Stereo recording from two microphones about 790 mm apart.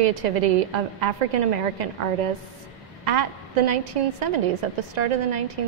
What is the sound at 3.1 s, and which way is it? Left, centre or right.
A woman's voice, right.